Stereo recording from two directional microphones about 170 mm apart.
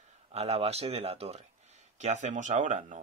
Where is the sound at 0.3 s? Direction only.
40° right (ahead or behind).